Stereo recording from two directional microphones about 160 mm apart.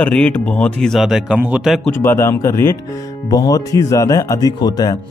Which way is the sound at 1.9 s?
15° left (ahead or behind).